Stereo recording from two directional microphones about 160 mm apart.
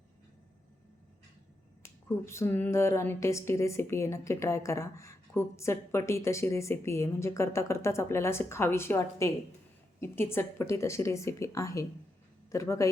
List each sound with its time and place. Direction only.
1.8 s speech: 15° left (ahead or behind)